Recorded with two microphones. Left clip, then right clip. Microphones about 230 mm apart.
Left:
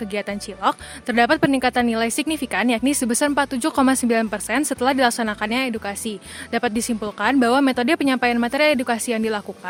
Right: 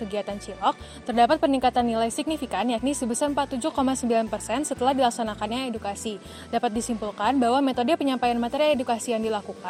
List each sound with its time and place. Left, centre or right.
0.1 s speech: left